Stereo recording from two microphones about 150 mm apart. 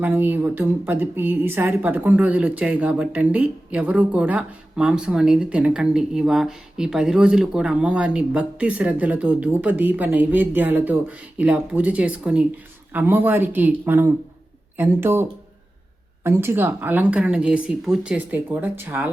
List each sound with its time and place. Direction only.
0.0 s a woman's voice: 10° right (ahead or behind)